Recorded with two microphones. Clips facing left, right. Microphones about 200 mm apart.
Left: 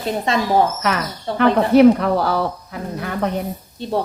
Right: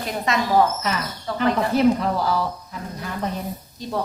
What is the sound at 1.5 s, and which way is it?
Speech, 65° left (ahead or behind).